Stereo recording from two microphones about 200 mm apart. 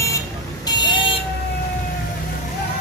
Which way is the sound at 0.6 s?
25° left (ahead or behind).